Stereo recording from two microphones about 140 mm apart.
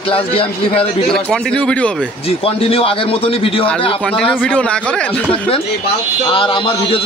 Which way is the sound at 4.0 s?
5° left (ahead or behind).